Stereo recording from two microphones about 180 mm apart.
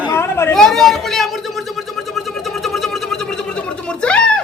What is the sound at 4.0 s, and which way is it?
Speech, 5° left (ahead or behind).